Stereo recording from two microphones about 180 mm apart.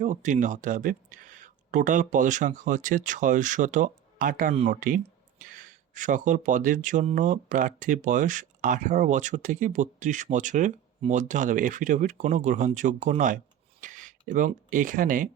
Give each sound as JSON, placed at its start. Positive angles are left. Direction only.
{"t": 0.0, "sound": "speech", "side_deg": -45}
{"t": 4.5, "sound": "speech", "side_deg": -35}
{"t": 5.4, "sound": "speech", "side_deg": -45}